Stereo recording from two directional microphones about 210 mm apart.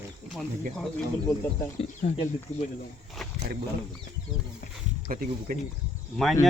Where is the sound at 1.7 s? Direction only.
25° left (ahead or behind).